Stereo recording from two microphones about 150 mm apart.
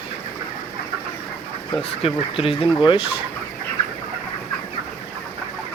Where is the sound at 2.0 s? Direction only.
40° left (ahead or behind).